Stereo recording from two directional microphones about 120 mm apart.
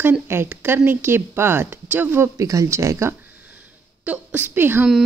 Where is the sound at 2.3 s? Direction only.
25° right (ahead or behind).